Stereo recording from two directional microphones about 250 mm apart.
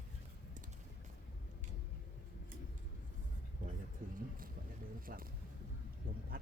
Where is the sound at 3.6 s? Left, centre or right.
Right.